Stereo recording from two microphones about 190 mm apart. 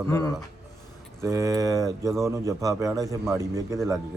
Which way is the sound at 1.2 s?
15° right (ahead or behind).